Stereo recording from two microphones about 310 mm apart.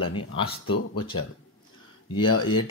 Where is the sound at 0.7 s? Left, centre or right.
Left.